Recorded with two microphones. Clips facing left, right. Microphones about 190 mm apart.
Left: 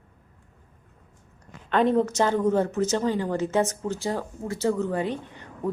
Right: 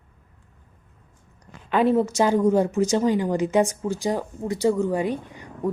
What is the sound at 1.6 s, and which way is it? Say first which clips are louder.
Speech: right 2 dB; 5° right (ahead or behind).